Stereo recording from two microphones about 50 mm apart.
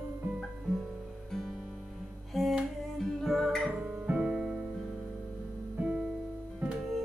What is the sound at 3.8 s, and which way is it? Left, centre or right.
Music, right.